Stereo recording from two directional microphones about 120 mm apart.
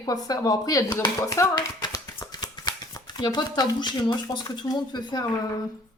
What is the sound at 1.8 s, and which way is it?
Shuffling cards, 30° left (ahead or behind).